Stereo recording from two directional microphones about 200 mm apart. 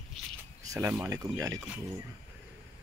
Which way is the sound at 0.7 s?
10° right (ahead or behind).